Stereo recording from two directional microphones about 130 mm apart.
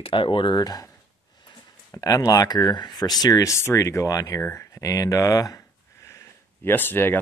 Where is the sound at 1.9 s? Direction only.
25° left (ahead or behind).